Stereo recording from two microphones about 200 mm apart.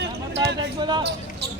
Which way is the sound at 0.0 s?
60° right (ahead or behind).